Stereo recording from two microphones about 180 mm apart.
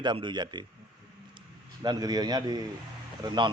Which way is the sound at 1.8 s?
20° right (ahead or behind).